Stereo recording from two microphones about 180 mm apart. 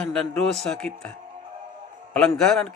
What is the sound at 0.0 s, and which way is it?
A man's voice, 5° left (ahead or behind).